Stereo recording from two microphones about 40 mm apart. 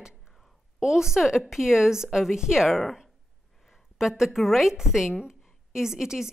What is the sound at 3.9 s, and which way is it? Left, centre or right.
A woman's voice, centre.